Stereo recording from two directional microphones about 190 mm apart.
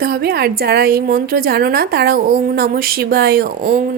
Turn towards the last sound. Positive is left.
turn(degrees=-50)  # may be behind; listen again after turning